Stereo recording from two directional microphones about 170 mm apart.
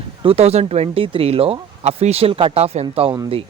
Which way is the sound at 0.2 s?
35° right (ahead or behind).